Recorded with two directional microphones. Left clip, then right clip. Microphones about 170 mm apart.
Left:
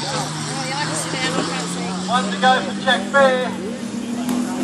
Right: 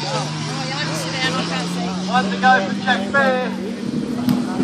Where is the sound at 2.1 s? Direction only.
20° right (ahead or behind).